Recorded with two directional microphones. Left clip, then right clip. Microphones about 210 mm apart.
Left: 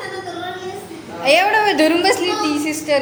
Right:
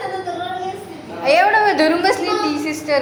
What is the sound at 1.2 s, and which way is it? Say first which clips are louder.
A woman's voice: right 1 dB; 25° left (ahead or behind).